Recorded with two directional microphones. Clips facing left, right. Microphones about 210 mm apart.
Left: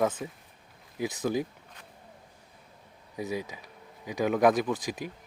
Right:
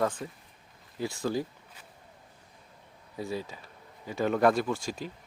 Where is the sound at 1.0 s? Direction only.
20° left (ahead or behind).